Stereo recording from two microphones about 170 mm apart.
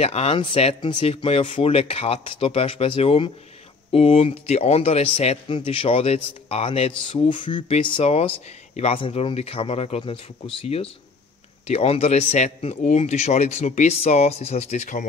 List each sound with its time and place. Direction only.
0.0 s a man's voice: 35° left (ahead or behind)